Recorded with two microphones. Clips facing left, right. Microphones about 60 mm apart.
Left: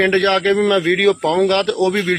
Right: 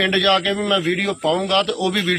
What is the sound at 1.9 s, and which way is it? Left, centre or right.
Speech, left.